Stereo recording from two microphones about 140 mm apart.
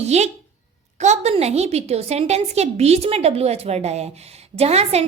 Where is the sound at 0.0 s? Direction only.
50° right (ahead or behind).